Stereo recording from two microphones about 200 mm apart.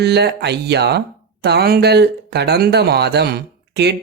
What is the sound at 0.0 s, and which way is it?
Speech, 55° right (ahead or behind).